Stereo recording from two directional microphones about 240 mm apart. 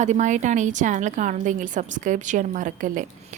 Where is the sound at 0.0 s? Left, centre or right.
Right.